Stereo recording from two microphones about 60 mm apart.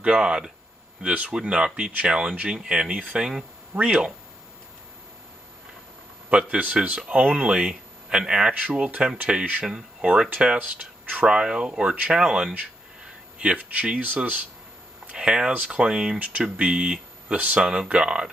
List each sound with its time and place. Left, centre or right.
0.0 s speech: centre
6.3 s speech: centre
10.6 s speech: right
11.2 s speech: centre
15.1 s speech: centre
16.2 s speech: right